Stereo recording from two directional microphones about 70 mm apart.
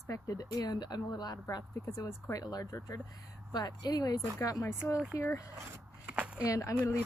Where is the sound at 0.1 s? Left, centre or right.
Left.